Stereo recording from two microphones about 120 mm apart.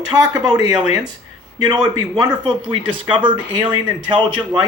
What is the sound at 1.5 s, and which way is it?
Speech, 35° right (ahead or behind).